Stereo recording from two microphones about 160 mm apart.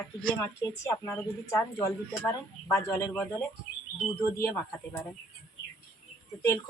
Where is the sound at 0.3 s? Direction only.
15° left (ahead or behind).